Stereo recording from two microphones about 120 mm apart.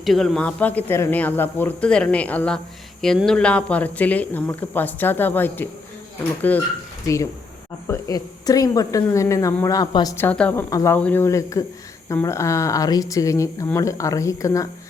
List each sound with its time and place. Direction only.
0.0 s speech: centre (ahead or behind)
7.9 s speech: 30° left (ahead or behind)
10.2 s speech: 10° left (ahead or behind)
10.7 s speech: 30° left (ahead or behind)
10.9 s speech: 15° left (ahead or behind)